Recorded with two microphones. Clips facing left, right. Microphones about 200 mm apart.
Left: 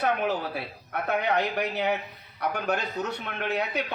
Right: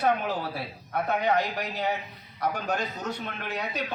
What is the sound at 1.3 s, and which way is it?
A man's voice, 65° left (ahead or behind).